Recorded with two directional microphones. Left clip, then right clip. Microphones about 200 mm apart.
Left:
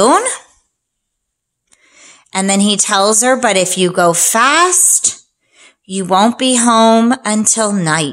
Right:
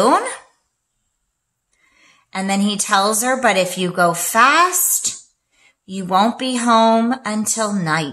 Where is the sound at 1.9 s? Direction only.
50° left (ahead or behind).